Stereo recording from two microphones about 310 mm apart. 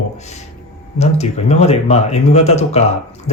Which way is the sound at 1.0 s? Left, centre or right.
Left.